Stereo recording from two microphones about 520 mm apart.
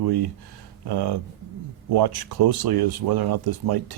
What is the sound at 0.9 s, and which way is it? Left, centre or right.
Speech, right.